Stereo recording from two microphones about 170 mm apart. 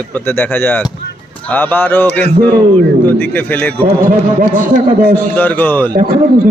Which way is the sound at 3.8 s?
55° right (ahead or behind).